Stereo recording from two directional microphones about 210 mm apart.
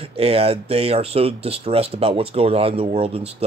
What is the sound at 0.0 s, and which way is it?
Speech, 30° right (ahead or behind).